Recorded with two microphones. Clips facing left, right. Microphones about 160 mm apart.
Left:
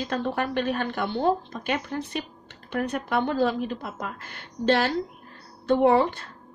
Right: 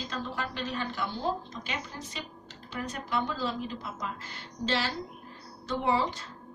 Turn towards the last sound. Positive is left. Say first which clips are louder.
# left 9 dB
turn(degrees=60)  # may be behind; listen again after turning